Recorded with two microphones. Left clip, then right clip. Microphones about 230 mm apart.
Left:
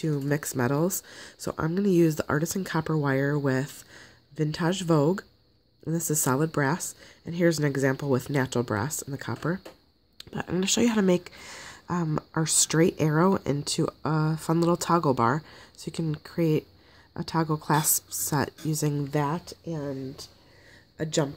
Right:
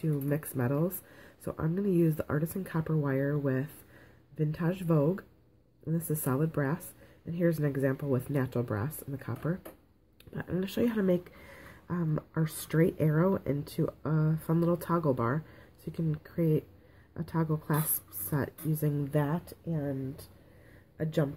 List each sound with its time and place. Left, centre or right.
0.0 s speech: left
21.0 s speech: left